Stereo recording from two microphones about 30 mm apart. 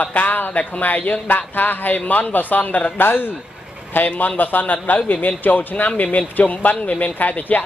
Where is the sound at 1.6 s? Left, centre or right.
Left.